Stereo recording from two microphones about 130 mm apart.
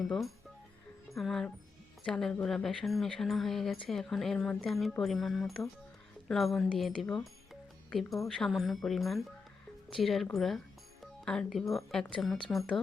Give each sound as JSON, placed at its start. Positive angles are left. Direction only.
{"t": 0.1, "sound": "speech", "side_deg": 0}